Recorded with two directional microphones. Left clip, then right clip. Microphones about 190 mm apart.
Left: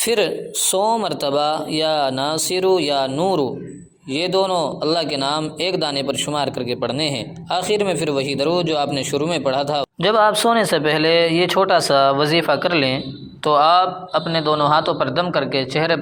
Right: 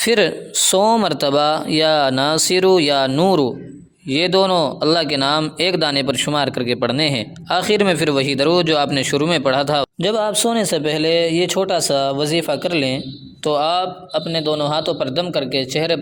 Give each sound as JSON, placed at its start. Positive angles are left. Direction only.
{"t": 0.0, "sound": "a man's voice", "side_deg": -40}